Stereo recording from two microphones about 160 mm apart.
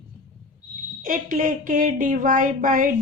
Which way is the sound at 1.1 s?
60° right (ahead or behind).